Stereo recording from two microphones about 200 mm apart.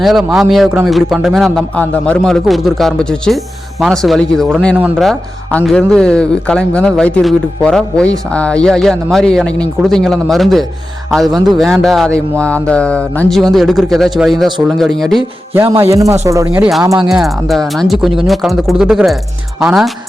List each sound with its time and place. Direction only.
0.0 s speech: centre (ahead or behind)
15.8 s speech: 15° right (ahead or behind)
17.0 s speech: centre (ahead or behind)